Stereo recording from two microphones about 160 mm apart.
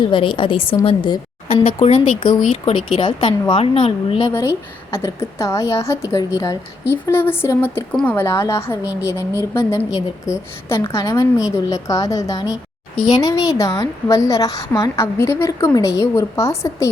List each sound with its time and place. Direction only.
0.1 s a woman's voice: 30° left (ahead or behind)
1.6 s speech: 40° left (ahead or behind)
4.3 s a woman's voice: 15° left (ahead or behind)